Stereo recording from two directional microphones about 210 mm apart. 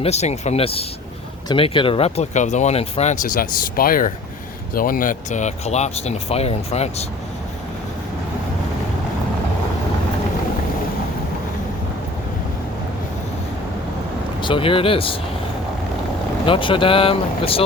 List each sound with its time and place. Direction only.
0.0 s speech: 30° left (ahead or behind)
14.4 s speech: 25° left (ahead or behind)
16.5 s speech: 25° left (ahead or behind)